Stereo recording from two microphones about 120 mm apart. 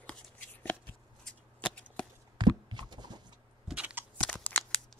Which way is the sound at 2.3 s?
40° right (ahead or behind).